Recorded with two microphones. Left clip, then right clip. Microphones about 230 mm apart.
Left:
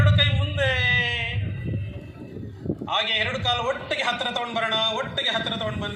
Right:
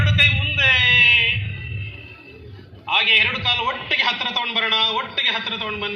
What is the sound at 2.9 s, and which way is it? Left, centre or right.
A man's voice, left.